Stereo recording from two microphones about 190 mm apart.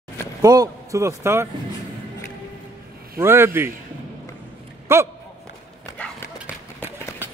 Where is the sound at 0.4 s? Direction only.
20° right (ahead or behind).